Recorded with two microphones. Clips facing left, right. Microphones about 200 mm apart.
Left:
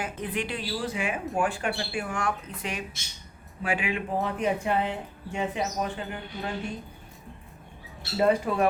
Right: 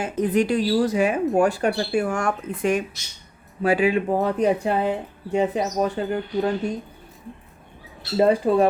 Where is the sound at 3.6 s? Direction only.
40° right (ahead or behind).